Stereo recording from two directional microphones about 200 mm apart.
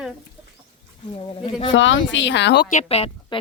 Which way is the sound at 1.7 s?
70° left (ahead or behind).